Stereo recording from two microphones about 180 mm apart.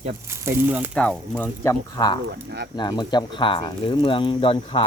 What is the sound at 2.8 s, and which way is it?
Speech, 25° left (ahead or behind).